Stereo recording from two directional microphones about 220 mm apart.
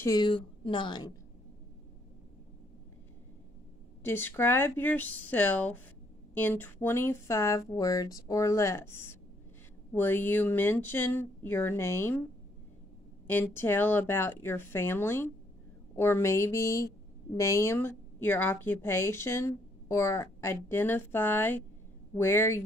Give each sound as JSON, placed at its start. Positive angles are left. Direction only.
{"t": 0.0, "sound": "a woman's voice", "side_deg": 20}
{"t": 4.0, "sound": "a woman's voice", "side_deg": 10}
{"t": 13.3, "sound": "a woman's voice", "side_deg": 10}